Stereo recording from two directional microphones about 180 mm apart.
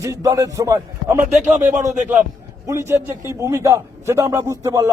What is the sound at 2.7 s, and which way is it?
A man's voice, 15° right (ahead or behind).